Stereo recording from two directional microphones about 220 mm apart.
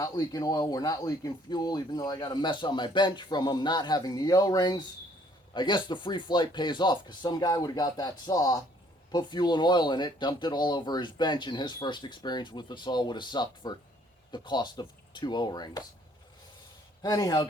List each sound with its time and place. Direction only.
0.0 s speech: 15° left (ahead or behind)
17.0 s speech: 15° left (ahead or behind)